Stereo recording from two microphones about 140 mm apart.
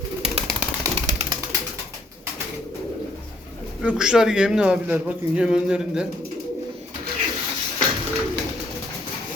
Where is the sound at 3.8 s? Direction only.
5° right (ahead or behind).